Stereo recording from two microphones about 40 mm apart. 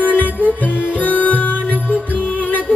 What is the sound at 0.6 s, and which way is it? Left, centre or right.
Music, right.